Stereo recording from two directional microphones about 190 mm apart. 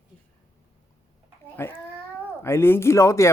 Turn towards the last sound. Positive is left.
turn(degrees=15)  # may be behind; listen again after turning